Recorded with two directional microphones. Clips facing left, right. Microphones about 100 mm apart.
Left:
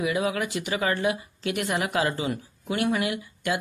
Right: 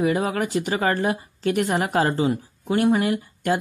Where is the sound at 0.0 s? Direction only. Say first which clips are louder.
Right 4 dB; 40° right (ahead or behind).